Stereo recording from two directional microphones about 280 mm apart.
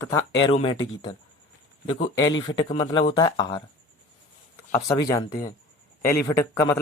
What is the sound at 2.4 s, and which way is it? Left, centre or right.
Speech, centre.